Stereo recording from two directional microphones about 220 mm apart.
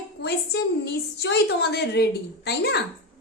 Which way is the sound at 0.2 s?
50° left (ahead or behind).